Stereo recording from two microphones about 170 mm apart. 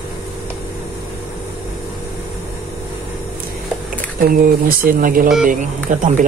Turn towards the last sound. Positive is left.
turn(degrees=-50)  # may be behind; listen again after turning